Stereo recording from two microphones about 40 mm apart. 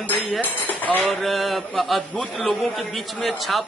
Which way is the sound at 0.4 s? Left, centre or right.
Left.